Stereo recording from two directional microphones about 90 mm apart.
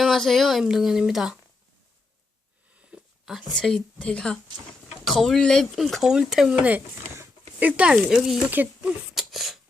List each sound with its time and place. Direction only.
0.0 s speech: centre (ahead or behind)
2.9 s a sound: 5° right (ahead or behind)
3.5 s speech: 5° left (ahead or behind)
7.6 s speech: 15° right (ahead or behind)
8.4 s speech: 20° right (ahead or behind)
9.1 s a sound: centre (ahead or behind)